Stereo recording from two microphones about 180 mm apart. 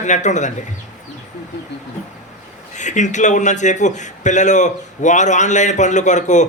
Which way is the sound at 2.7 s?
40° left (ahead or behind).